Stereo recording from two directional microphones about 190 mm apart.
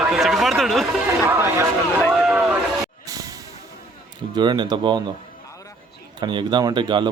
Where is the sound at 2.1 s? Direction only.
Centre (ahead or behind).